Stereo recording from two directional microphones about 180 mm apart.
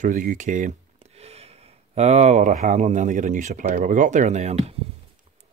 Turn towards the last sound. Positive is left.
turn(degrees=-40)  # may be behind; listen again after turning